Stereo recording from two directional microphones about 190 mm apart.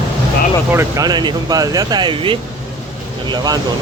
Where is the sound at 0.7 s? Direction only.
15° right (ahead or behind).